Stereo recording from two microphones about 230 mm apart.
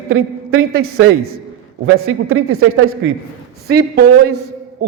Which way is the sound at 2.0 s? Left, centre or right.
Right.